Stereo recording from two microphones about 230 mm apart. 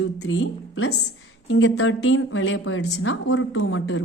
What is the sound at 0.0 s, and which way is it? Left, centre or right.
A woman's voice, left.